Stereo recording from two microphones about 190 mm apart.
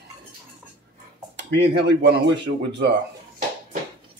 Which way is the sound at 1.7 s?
65° right (ahead or behind).